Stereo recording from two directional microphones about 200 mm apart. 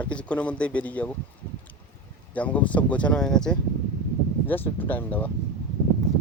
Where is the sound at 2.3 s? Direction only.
5° left (ahead or behind).